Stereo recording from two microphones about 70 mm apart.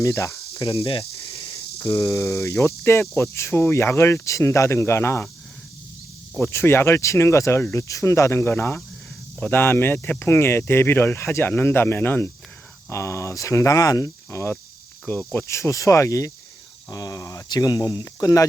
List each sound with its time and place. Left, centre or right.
0.0 s cricket: left
2.0 s speech: left
6.4 s speech: left
12.9 s speech: left
15.1 s cricket: left
15.4 s speech: left
17.5 s speech: left